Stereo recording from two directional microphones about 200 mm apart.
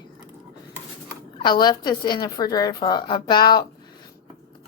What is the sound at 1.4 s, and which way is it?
A woman's voice, 20° left (ahead or behind).